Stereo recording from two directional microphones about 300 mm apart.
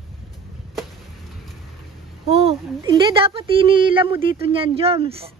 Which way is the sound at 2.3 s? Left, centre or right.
Centre.